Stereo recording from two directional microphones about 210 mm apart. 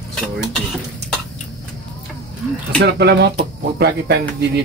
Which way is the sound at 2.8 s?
50° right (ahead or behind).